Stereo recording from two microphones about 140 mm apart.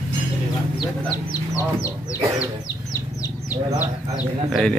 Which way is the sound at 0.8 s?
30° left (ahead or behind).